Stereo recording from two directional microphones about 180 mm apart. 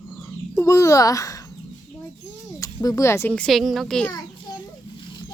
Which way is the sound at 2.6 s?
20° left (ahead or behind).